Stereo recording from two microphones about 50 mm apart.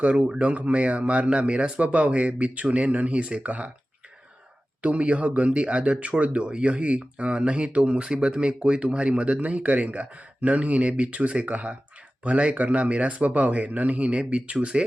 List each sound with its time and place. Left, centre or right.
0.0 s speech: right
4.8 s speech: right